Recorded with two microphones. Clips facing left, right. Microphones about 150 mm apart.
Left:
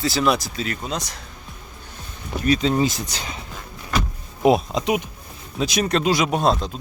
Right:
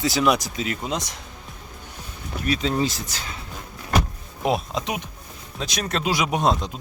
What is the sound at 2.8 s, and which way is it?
Speech, 20° left (ahead or behind).